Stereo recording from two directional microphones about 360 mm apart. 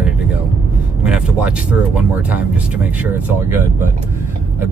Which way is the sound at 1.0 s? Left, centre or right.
Centre.